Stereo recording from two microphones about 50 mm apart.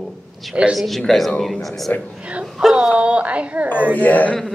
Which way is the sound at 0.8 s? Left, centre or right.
Centre.